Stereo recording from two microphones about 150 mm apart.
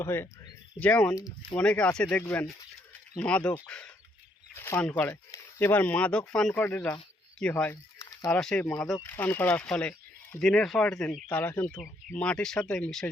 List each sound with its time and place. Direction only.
0.0 s speech: 15° left (ahead or behind)
7.7 s a sound: 20° left (ahead or behind)
8.3 s speech: 5° left (ahead or behind)